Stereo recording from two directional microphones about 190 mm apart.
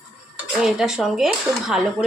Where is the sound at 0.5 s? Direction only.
Centre (ahead or behind).